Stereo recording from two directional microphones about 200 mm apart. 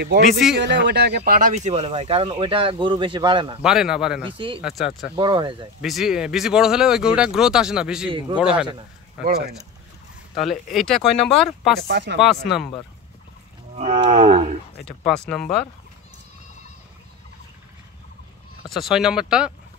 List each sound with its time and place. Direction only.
0.2 s speech: centre (ahead or behind)
0.6 s speech: 60° right (ahead or behind); by 3.5 s 25° right (ahead or behind)
3.6 s speech: 5° right (ahead or behind)
5.1 s speech: 25° right (ahead or behind)
5.8 s speech: centre (ahead or behind)
11.9 s speech: 60° right (ahead or behind)
13.7 s speech: 30° right (ahead or behind)
15.0 s speech: centre (ahead or behind)
18.7 s speech: centre (ahead or behind)